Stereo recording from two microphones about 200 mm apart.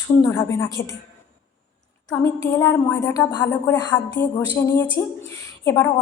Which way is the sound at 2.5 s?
15° left (ahead or behind).